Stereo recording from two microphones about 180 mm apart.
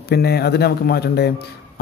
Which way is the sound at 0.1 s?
65° left (ahead or behind).